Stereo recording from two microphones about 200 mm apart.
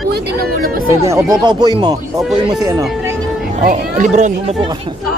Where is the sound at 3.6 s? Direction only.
40° right (ahead or behind).